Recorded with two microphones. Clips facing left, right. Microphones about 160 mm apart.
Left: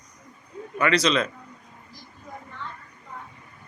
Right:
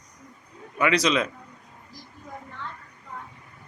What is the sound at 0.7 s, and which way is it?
Speech, 10° right (ahead or behind).